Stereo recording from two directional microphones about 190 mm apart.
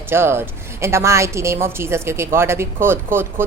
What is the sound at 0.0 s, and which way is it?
A woman's voice, 10° right (ahead or behind).